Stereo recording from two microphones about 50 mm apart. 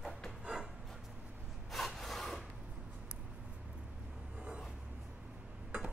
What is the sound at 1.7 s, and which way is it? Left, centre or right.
Rub, centre.